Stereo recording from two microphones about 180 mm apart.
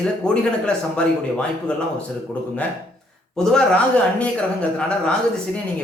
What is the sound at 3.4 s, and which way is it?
Speech, 5° left (ahead or behind).